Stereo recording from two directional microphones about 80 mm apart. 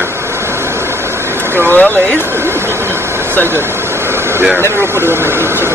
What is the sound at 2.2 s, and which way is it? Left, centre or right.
Vehicle, right.